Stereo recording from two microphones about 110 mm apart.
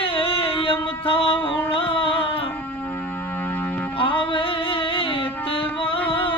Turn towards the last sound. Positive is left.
turn(degrees=55)  # may be behind; listen again after turning